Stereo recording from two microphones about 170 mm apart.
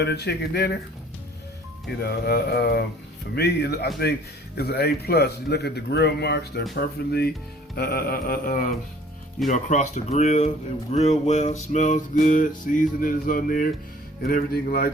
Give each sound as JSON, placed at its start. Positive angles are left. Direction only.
{"t": 0.0, "sound": "speech", "side_deg": 75}
{"t": 2.0, "sound": "speech", "side_deg": 70}
{"t": 7.8, "sound": "mantra", "side_deg": 60}
{"t": 9.5, "sound": "music", "side_deg": 45}
{"t": 14.3, "sound": "mantra", "side_deg": 60}